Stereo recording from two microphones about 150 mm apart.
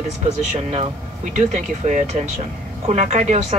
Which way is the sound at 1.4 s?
55° right (ahead or behind).